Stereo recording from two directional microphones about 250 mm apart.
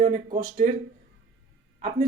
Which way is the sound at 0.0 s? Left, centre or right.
Right.